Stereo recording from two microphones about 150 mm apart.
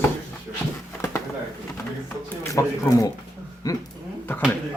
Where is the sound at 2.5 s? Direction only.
20° left (ahead or behind).